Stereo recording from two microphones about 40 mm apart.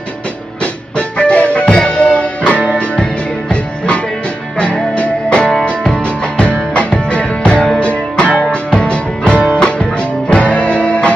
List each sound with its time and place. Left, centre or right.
0.9 s music: left